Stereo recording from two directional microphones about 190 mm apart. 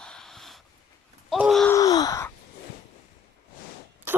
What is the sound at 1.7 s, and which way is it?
Wail, 20° left (ahead or behind).